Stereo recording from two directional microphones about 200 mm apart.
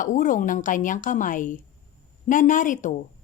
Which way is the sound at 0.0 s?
40° left (ahead or behind).